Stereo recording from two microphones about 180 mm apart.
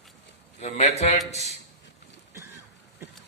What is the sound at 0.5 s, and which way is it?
Speech, 40° left (ahead or behind).